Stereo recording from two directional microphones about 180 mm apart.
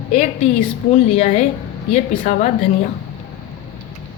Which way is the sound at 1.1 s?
40° left (ahead or behind).